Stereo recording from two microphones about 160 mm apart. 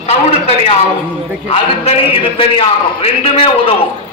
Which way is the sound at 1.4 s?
35° left (ahead or behind).